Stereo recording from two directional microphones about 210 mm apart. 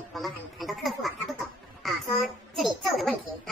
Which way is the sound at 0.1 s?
Centre (ahead or behind).